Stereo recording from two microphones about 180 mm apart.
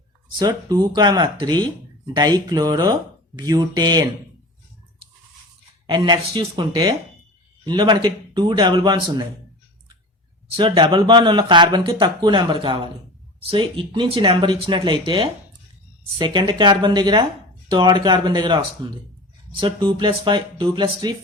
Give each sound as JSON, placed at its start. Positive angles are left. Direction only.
{"t": 0.3, "sound": "speech", "side_deg": -20}
{"t": 5.9, "sound": "speech", "side_deg": -25}
{"t": 10.6, "sound": "speech", "side_deg": -25}